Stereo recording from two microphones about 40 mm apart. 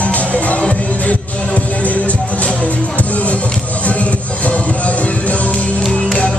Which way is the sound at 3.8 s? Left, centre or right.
Left.